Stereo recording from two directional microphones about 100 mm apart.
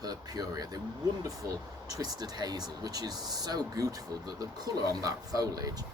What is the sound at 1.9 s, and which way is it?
Speech, 40° right (ahead or behind).